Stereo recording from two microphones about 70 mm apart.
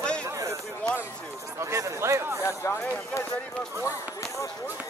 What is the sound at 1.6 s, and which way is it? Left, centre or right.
Speech, right.